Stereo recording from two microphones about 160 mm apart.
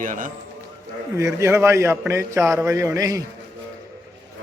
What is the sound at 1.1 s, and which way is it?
A man's voice, 15° right (ahead or behind).